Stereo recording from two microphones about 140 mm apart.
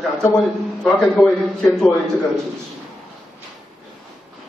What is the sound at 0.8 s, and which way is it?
A man's voice, 5° left (ahead or behind).